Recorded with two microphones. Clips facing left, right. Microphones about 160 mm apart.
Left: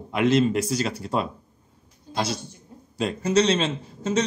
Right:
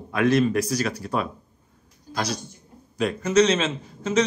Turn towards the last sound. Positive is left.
turn(degrees=30)  # may be behind; listen again after turning